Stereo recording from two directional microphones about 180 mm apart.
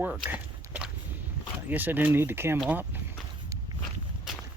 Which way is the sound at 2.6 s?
10° right (ahead or behind).